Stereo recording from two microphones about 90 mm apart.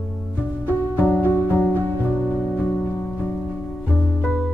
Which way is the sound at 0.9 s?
20° left (ahead or behind).